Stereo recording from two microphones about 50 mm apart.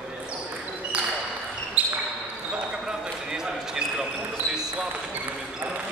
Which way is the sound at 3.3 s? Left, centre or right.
Centre.